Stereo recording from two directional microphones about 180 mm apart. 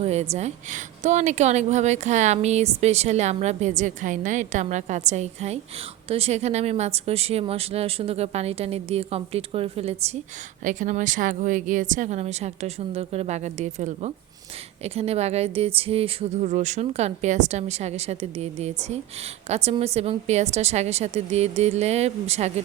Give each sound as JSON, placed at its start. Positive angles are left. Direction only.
{"t": 0.0, "sound": "a woman's voice", "side_deg": -35}
{"t": 10.6, "sound": "a woman's voice", "side_deg": -45}